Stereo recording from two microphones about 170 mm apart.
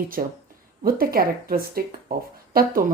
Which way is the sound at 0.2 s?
50° right (ahead or behind).